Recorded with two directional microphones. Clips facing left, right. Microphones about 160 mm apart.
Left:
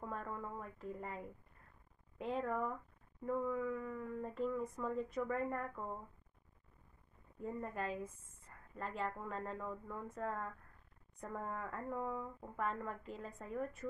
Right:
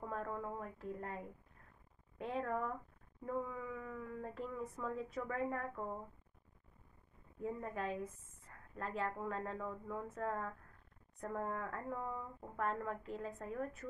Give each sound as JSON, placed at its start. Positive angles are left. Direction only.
{"t": 0.0, "sound": "speech", "side_deg": 0}
{"t": 7.4, "sound": "a woman's voice", "side_deg": 0}